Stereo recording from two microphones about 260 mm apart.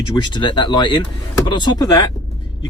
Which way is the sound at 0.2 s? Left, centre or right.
Centre.